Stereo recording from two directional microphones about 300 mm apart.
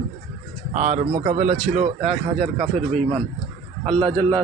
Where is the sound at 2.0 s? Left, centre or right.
Centre.